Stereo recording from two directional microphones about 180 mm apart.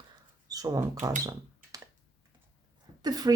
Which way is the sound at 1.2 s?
20° right (ahead or behind).